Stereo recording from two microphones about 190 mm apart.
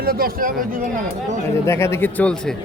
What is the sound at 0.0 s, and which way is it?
Speech, 50° right (ahead or behind).